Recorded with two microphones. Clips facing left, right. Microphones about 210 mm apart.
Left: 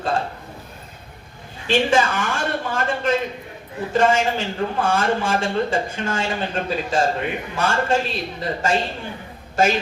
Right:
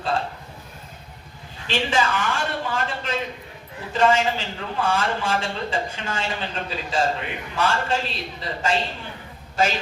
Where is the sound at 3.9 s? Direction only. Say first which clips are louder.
Left 2 dB; 50° left (ahead or behind).